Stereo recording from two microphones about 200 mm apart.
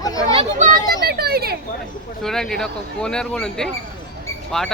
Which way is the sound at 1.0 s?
50° right (ahead or behind).